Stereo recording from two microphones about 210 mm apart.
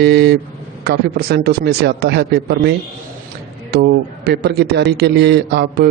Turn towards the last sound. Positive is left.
turn(degrees=-50)  # may be behind; listen again after turning